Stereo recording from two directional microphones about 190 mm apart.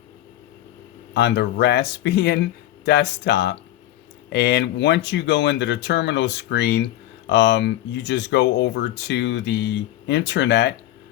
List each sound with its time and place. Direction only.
1.1 s speech: 65° left (ahead or behind)